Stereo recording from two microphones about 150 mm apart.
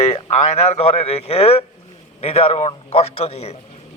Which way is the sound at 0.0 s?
45° left (ahead or behind).